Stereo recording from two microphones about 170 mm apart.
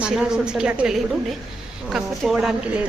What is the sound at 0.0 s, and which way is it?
A woman's voice, 5° right (ahead or behind).